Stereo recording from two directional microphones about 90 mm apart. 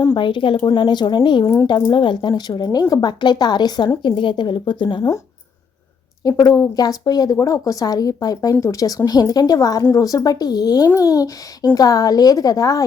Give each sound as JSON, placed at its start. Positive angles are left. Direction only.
{"t": 0.1, "sound": "speech", "side_deg": 65}
{"t": 4.0, "sound": "speech", "side_deg": 60}
{"t": 6.2, "sound": "speech", "side_deg": 45}